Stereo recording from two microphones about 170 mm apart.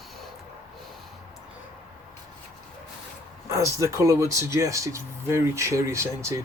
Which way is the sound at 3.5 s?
20° right (ahead or behind).